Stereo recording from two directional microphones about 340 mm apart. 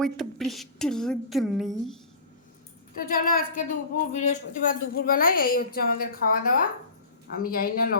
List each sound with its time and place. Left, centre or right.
0.0 s a woman's voice: centre
3.0 s a woman's voice: left